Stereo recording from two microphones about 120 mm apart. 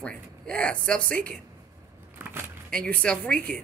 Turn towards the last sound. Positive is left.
turn(degrees=10)  # may be behind; listen again after turning